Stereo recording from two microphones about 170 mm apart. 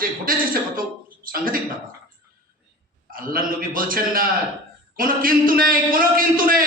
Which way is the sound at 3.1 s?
55° right (ahead or behind).